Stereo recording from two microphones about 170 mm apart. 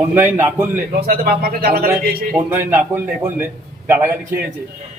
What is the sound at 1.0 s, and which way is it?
Speech, 65° right (ahead or behind).